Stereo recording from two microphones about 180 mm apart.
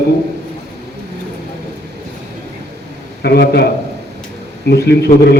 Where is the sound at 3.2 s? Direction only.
65° left (ahead or behind).